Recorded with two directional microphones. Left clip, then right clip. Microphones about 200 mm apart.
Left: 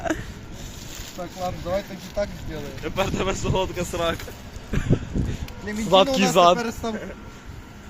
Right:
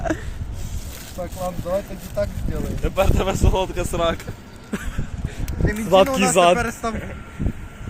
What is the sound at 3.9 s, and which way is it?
Speech, 20° right (ahead or behind).